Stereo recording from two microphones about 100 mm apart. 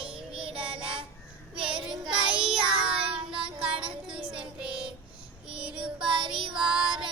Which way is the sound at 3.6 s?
60° right (ahead or behind).